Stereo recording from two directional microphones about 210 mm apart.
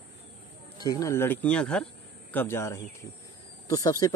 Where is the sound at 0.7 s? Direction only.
15° left (ahead or behind).